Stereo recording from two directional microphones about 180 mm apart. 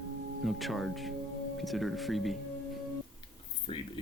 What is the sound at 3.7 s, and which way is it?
Speech, 30° left (ahead or behind).